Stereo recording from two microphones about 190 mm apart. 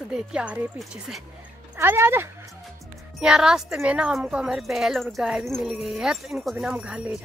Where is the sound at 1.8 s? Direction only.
10° right (ahead or behind).